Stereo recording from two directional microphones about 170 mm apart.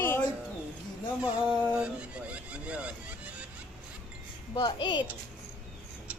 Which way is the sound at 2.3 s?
5° right (ahead or behind).